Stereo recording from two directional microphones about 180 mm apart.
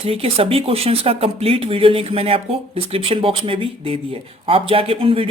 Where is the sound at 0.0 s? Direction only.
35° right (ahead or behind).